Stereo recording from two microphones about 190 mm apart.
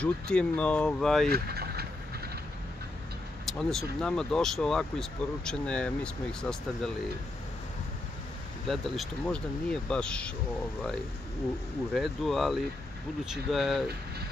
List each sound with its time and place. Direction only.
0.0 s speech: 5° left (ahead or behind)
1.3 s vehicle: 55° right (ahead or behind)
3.4 s speech: 5° left (ahead or behind)
8.6 s speech: centre (ahead or behind)
11.9 s speech: centre (ahead or behind)